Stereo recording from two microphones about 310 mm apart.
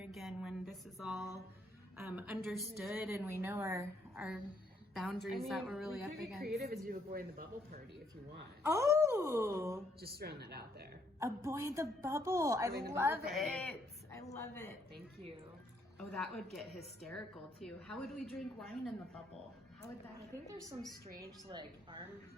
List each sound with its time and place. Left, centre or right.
0.0 s a sound: centre
2.0 s a woman's voice: centre
6.6 s speech: right
8.6 s a woman's voice: centre
10.0 s speech: right
11.2 s a woman's voice: centre
16.0 s a woman's voice: centre
20.5 s a woman's voice: centre